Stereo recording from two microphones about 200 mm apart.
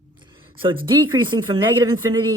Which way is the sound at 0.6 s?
25° right (ahead or behind).